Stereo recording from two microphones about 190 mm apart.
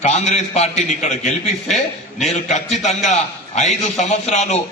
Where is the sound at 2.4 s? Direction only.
35° left (ahead or behind).